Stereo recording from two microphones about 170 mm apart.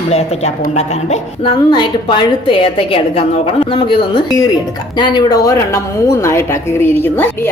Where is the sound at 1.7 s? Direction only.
30° left (ahead or behind); by 7.5 s 15° left (ahead or behind).